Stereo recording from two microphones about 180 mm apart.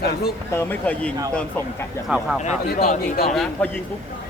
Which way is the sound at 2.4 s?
45° left (ahead or behind).